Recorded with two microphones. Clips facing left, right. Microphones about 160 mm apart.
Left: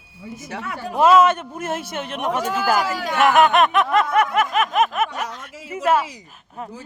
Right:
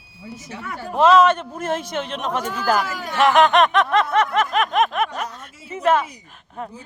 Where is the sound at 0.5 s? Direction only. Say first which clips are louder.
Left 2 dB; 85° left.